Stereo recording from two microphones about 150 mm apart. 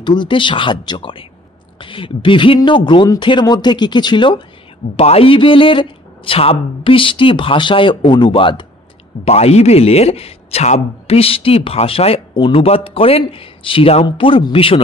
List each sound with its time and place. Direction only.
0.0 s a man's voice: 30° left (ahead or behind)
9.2 s a man's voice: 45° left (ahead or behind)